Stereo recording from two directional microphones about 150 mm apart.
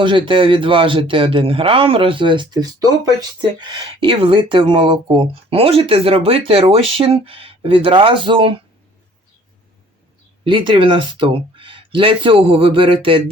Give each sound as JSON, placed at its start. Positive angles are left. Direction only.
{"t": 0.0, "sound": "speech", "side_deg": -35}
{"t": 10.4, "sound": "speech", "side_deg": -35}